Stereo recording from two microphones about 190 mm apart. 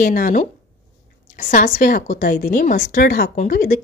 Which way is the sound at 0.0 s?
45° left (ahead or behind).